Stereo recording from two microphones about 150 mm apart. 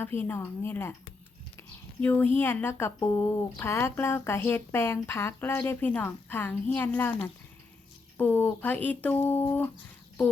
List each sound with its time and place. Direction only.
0.0 s speech: 15° left (ahead or behind)